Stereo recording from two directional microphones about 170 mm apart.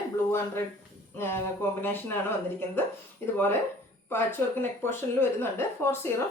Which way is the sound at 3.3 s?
10° left (ahead or behind).